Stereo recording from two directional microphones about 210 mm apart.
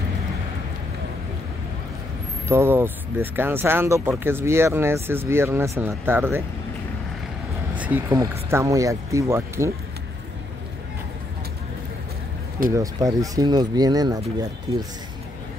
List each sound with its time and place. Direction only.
2.4 s speech: 10° right (ahead or behind)
7.7 s speech: 5° right (ahead or behind)
12.7 s speech: 15° right (ahead or behind)